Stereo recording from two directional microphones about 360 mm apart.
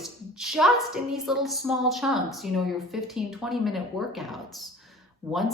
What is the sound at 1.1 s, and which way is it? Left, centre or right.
Speech, centre.